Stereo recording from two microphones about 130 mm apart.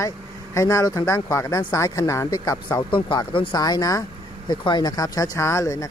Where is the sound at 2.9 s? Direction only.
35° left (ahead or behind).